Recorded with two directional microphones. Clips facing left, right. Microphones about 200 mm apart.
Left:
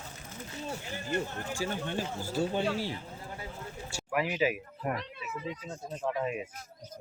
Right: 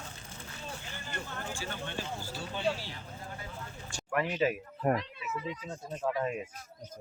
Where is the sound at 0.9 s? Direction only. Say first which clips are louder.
Left 8 dB; 40° left (ahead or behind).